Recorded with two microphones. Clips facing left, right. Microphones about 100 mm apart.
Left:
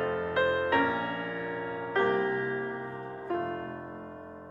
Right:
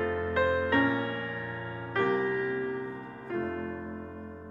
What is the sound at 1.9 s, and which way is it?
Music, 40° left (ahead or behind).